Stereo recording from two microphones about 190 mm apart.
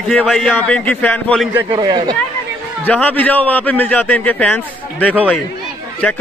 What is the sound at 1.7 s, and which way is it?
Speech, 20° right (ahead or behind).